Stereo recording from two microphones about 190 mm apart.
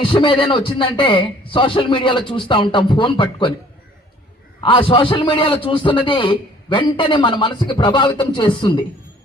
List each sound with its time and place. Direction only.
0.0 s a man's voice: 25° left (ahead or behind)
4.6 s a man's voice: 25° left (ahead or behind)